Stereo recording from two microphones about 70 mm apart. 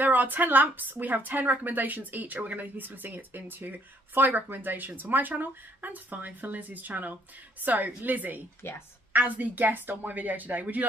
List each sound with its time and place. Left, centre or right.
0.0 s speech: right
8.6 s a woman's voice: left
9.1 s speech: right